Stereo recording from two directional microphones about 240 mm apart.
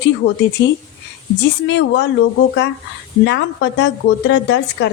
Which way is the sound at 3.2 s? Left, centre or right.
Left.